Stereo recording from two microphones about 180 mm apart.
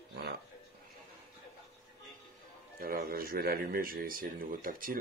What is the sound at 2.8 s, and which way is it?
Speech, 55° right (ahead or behind).